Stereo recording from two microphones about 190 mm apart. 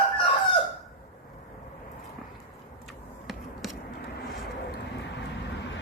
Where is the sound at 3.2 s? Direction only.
Centre (ahead or behind).